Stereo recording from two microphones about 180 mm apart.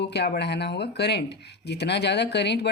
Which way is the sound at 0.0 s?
70° left (ahead or behind).